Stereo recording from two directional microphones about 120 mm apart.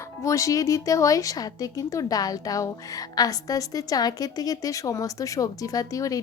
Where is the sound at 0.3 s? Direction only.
25° left (ahead or behind).